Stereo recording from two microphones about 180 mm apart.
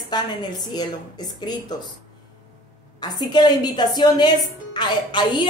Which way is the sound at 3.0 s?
25° left (ahead or behind).